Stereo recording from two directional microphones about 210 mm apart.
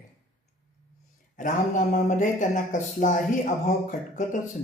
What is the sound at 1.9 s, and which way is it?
Speech, 35° left (ahead or behind).